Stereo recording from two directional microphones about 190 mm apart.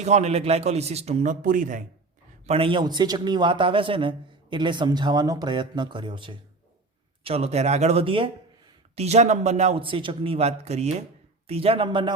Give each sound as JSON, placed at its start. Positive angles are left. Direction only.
{"t": 0.0, "sound": "speech", "side_deg": -35}
{"t": 2.5, "sound": "a man's voice", "side_deg": -25}